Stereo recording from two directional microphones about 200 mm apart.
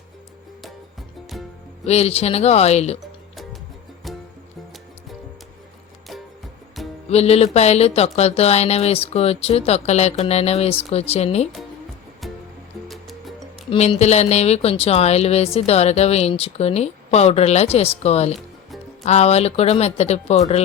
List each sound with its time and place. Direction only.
1.8 s speech: 30° left (ahead or behind)
6.8 s music: centre (ahead or behind)
7.1 s speech: 30° left (ahead or behind)
12.2 s music: centre (ahead or behind)
13.7 s speech: 30° left (ahead or behind)